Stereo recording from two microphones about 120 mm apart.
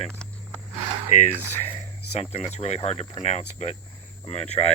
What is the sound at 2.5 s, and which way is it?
Speech, 65° left (ahead or behind).